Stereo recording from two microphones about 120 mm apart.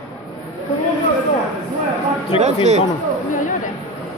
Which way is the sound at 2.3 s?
50° left (ahead or behind).